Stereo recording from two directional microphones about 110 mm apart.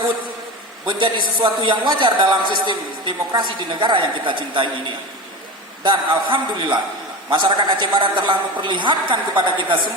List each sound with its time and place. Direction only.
0.9 s a man's voice: 50° right (ahead or behind)
5.8 s a man's voice: 50° right (ahead or behind)